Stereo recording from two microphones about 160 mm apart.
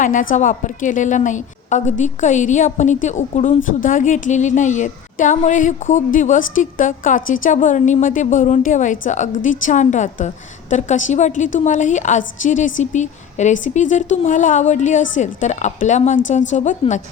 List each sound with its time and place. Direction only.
0.0 s a woman's voice: 55° left (ahead or behind)